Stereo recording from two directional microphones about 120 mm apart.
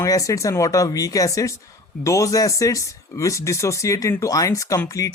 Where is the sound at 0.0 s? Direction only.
25° left (ahead or behind).